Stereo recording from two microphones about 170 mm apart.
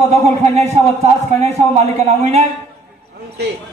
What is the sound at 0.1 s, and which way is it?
Speech, 40° right (ahead or behind).